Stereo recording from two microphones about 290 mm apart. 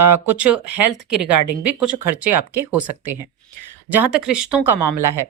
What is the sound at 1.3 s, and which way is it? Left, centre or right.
Speech, right.